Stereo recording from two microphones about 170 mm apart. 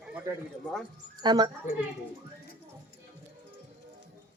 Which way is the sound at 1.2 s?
25° right (ahead or behind).